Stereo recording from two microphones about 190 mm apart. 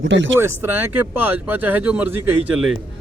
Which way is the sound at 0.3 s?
10° right (ahead or behind).